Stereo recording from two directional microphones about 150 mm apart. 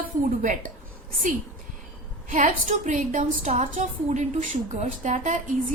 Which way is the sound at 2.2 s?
60° right (ahead or behind).